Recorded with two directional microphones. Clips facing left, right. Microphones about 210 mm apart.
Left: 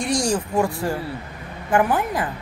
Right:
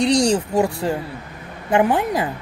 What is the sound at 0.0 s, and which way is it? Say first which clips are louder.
Speech: right 6 dB; 65° right (ahead or behind).